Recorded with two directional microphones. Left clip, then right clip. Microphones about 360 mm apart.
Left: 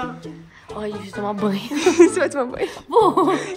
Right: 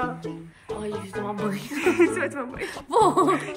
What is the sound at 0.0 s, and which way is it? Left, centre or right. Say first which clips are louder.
Music: right 1 dB; centre.